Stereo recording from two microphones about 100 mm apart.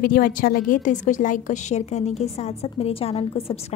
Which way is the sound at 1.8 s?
90° left.